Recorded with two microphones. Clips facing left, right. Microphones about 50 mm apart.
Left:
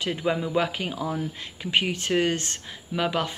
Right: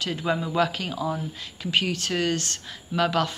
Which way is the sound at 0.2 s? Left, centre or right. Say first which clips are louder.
Right 1 dB; centre.